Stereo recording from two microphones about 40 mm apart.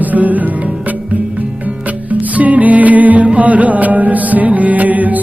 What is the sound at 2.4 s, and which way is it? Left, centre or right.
Music, right.